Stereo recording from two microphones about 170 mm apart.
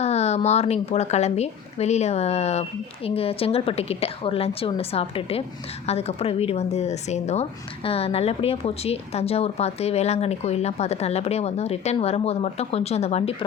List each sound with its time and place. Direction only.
0.0 s a woman's voice: 40° left (ahead or behind)